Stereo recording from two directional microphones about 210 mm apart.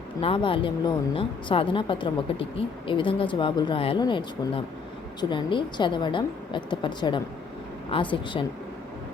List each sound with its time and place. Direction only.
0.2 s speech: 25° left (ahead or behind)